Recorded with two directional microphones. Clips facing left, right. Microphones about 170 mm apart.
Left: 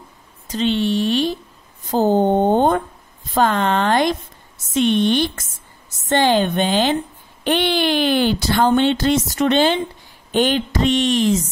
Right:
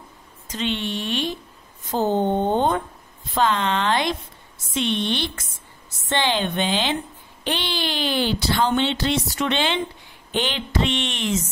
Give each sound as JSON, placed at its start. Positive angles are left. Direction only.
{"t": 0.5, "sound": "speech", "side_deg": 35}